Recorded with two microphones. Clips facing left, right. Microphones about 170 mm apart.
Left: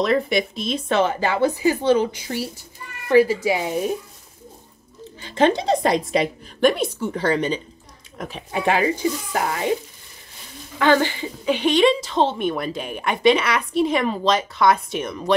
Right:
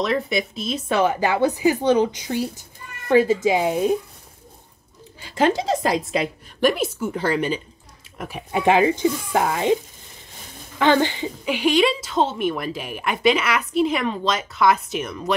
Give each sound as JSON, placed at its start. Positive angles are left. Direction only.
{"t": 0.0, "sound": "speech", "side_deg": 0}
{"t": 5.4, "sound": "a woman's voice", "side_deg": -5}
{"t": 10.8, "sound": "a woman's voice", "side_deg": -20}